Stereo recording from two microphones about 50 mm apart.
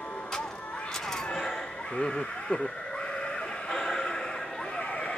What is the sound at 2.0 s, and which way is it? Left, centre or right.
Speech, centre.